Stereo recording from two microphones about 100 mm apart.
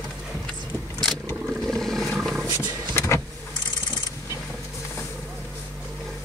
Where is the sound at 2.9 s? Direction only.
25° left (ahead or behind).